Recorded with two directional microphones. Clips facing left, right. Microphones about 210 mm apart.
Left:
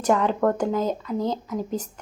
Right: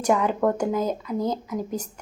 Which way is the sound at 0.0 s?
10° right (ahead or behind).